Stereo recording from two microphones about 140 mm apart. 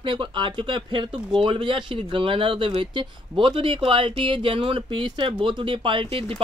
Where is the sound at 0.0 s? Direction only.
35° right (ahead or behind).